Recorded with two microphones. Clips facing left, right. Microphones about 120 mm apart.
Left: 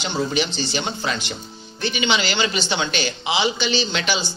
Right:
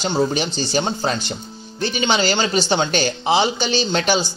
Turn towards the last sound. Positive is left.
turn(degrees=-45)  # may be behind; listen again after turning